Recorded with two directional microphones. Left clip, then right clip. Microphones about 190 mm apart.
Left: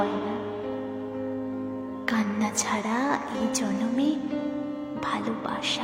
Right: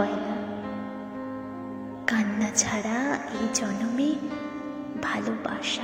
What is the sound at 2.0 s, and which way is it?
A woman's voice, 5° right (ahead or behind).